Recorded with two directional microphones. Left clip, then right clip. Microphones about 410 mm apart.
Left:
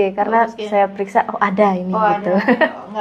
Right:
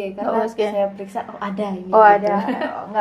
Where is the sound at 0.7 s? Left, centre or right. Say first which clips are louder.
Left 7 dB; left.